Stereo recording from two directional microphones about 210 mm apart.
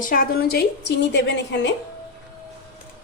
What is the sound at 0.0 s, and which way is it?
A woman's voice, 40° left (ahead or behind).